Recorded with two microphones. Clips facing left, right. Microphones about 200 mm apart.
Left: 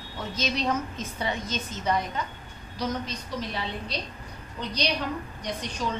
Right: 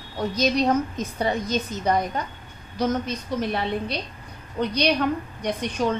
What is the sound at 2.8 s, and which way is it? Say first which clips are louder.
A woman's voice: right 6 dB; 50° right (ahead or behind).